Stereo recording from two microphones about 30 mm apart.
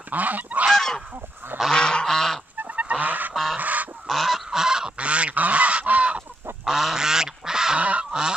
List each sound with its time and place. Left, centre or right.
0.1 s goose: right
0.7 s goose: centre
1.7 s goose: left
2.0 s goose: centre
2.7 s goose: right
3.5 s goose: right
4.1 s goose: centre
4.5 s goose: right
4.9 s goose: right
5.3 s goose: right
5.6 s goose: right
6.6 s goose: centre